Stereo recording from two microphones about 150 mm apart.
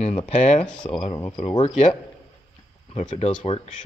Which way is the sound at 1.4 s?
40° left (ahead or behind).